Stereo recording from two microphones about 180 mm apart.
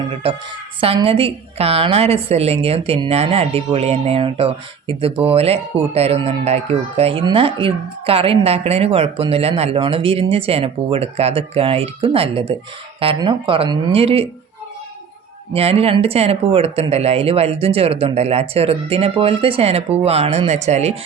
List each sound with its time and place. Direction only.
0.0 s a woman's voice: 30° right (ahead or behind)
15.5 s speech: 35° right (ahead or behind)